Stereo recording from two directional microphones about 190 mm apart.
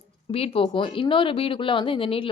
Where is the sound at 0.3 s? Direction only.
30° left (ahead or behind).